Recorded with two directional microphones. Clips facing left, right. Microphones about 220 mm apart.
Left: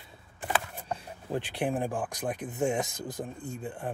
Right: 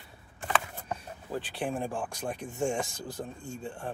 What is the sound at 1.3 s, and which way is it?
Speech, 20° left (ahead or behind).